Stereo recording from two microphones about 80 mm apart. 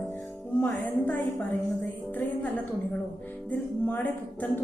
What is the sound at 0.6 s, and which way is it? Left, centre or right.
Music, centre.